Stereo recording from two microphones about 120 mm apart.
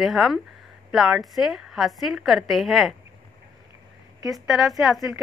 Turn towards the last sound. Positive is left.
turn(degrees=0)  # may be behind; listen again after turning